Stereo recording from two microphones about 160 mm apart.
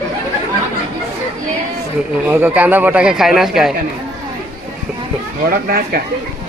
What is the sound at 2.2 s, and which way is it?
A man's voice, 10° right (ahead or behind).